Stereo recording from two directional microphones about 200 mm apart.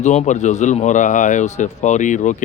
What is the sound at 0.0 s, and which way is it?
Speech, 35° left (ahead or behind).